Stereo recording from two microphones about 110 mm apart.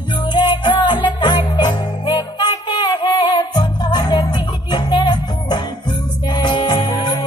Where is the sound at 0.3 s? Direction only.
45° left (ahead or behind).